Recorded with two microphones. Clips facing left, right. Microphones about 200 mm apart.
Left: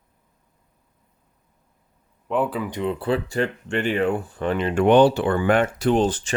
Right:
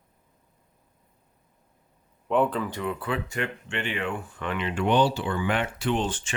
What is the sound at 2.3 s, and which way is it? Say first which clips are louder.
Speech: even; 5° left (ahead or behind).